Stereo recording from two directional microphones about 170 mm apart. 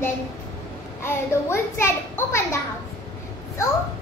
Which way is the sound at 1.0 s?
15° left (ahead or behind).